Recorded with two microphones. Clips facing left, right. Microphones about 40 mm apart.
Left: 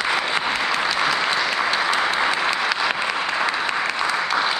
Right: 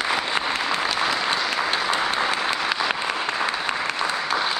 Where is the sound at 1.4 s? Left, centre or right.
Left.